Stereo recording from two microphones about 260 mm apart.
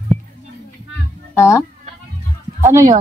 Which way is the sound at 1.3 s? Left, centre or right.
Centre.